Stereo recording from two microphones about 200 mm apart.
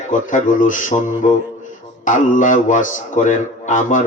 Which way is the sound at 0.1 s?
40° left (ahead or behind).